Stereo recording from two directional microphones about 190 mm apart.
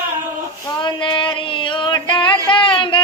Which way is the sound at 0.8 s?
25° left (ahead or behind).